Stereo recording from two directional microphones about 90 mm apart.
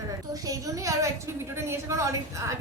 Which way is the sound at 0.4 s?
40° right (ahead or behind).